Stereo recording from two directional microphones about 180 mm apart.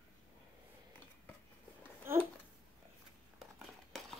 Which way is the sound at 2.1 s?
15° right (ahead or behind).